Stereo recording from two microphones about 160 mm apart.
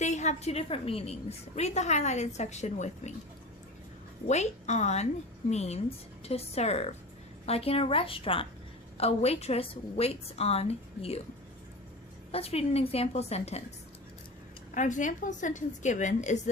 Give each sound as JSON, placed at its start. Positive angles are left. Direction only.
{"t": 0.0, "sound": "a woman's voice", "side_deg": 45}
{"t": 4.3, "sound": "a woman's voice", "side_deg": 45}
{"t": 12.3, "sound": "a woman's voice", "side_deg": 40}
{"t": 14.8, "sound": "a woman's voice", "side_deg": 50}